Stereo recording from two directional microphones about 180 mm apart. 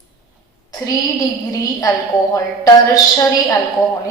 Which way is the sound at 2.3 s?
20° left (ahead or behind).